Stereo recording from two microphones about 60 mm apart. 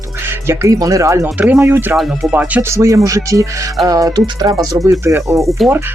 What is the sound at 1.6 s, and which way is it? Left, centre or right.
Speech, right.